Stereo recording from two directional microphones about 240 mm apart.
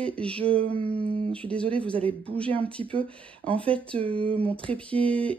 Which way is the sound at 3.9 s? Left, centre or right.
Right.